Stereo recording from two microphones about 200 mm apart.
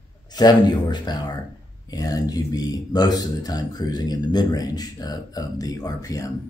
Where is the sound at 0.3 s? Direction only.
20° left (ahead or behind).